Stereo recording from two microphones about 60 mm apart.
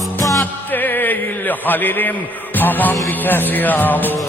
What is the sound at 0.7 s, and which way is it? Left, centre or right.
Music, left.